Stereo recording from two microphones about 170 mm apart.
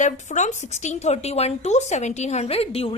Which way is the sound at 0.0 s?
45° left (ahead or behind).